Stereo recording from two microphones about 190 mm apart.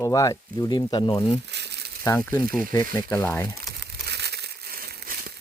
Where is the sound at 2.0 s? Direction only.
15° left (ahead or behind).